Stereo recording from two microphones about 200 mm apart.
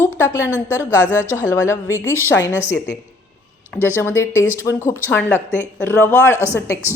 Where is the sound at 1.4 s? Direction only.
15° left (ahead or behind).